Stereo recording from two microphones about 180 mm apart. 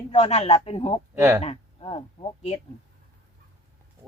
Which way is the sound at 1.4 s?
30° left (ahead or behind).